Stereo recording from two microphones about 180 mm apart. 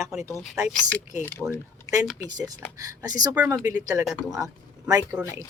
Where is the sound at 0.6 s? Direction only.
5° right (ahead or behind).